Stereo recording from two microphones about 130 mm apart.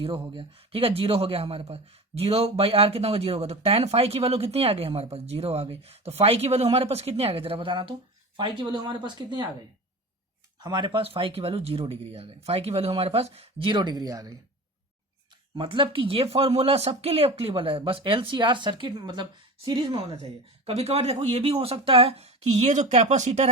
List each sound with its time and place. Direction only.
0.0 s speech: 40° right (ahead or behind)
10.6 s speech: 35° right (ahead or behind)
15.5 s speech: 40° right (ahead or behind)
20.7 s speech: 50° right (ahead or behind)